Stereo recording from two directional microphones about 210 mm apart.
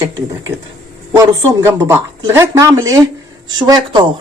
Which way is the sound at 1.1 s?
15° right (ahead or behind).